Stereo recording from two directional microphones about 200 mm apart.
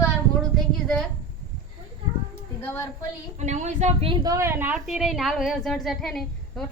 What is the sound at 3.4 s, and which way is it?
Speech, 35° right (ahead or behind).